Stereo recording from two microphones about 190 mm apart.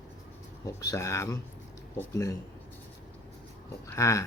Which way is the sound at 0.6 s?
20° left (ahead or behind).